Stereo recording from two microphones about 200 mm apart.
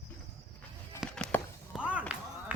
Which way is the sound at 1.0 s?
5° left (ahead or behind).